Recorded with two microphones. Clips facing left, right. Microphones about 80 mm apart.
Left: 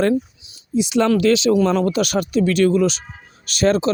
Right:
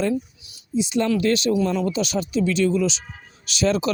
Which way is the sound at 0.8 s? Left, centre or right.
Left.